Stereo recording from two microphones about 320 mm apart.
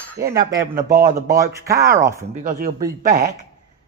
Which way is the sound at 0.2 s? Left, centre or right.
Centre.